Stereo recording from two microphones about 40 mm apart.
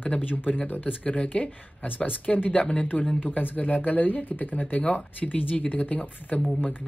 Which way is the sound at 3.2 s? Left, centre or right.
Left.